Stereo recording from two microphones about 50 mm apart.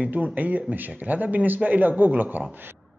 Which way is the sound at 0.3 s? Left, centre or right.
Right.